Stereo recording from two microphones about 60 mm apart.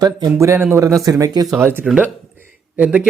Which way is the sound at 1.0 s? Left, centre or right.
Right.